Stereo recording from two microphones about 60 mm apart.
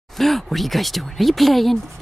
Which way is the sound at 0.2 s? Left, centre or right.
Centre.